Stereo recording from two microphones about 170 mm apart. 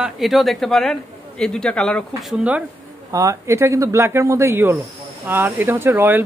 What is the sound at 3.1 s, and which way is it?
Speech, 15° right (ahead or behind).